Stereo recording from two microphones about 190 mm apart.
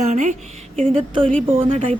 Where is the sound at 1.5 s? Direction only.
30° right (ahead or behind).